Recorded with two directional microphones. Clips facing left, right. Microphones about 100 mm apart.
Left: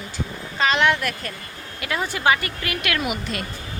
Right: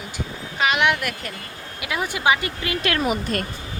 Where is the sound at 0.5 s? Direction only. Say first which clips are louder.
Left 1 dB; 15° right (ahead or behind); by 3.4 s 40° right (ahead or behind).